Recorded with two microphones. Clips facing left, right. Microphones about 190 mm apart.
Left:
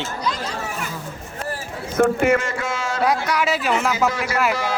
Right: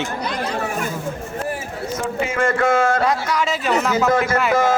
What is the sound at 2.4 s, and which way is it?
Speech, 55° right (ahead or behind).